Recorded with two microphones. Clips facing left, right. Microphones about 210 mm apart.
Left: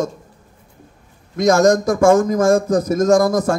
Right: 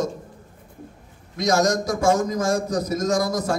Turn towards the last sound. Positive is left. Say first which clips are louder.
# left 8 dB
turn(degrees=50)  # may be behind; listen again after turning